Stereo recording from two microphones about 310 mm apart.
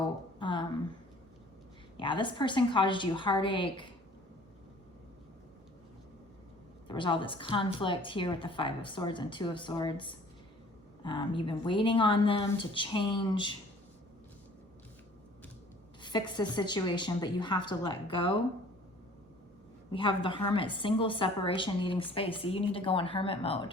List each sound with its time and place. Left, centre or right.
0.3 s a sound: centre
2.0 s a woman's voice: centre
6.8 s a woman's voice: centre
16.0 s a woman's voice: centre
19.9 s a woman's voice: centre